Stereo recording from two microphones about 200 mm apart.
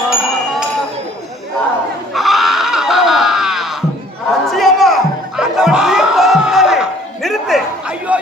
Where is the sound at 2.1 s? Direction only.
Centre (ahead or behind).